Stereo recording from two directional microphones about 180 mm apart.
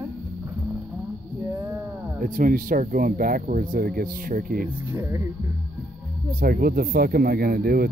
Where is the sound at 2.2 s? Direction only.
50° right (ahead or behind).